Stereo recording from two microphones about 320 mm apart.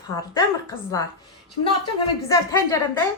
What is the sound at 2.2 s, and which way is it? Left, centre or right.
Speech, centre.